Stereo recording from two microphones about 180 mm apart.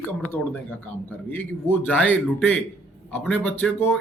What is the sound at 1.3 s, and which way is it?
A man's voice, 10° left (ahead or behind).